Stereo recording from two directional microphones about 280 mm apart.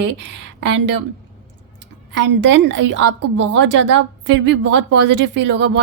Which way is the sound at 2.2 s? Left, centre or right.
Right.